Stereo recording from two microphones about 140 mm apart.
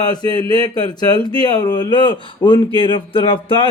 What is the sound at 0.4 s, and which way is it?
Speech, 40° right (ahead or behind).